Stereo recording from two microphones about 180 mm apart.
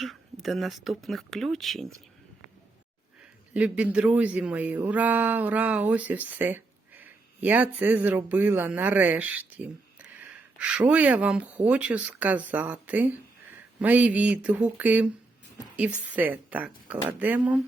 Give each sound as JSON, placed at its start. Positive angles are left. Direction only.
{"t": 0.0, "sound": "speech", "side_deg": 0}
{"t": 3.5, "sound": "speech", "side_deg": -5}